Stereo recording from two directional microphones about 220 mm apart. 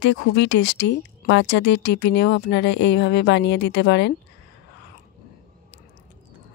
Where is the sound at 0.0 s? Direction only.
55° left (ahead or behind).